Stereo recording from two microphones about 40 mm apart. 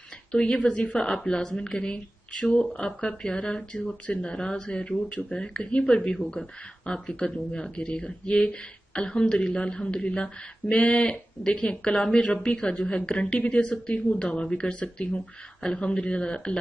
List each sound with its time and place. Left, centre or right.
0.3 s speech: left
0.6 s a woman's voice: left
0.9 s speech: centre